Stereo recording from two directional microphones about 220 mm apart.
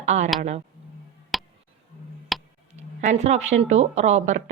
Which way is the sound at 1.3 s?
Centre (ahead or behind).